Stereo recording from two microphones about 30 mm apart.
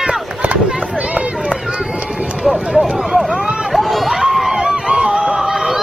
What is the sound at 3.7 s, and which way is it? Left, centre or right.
Run, centre.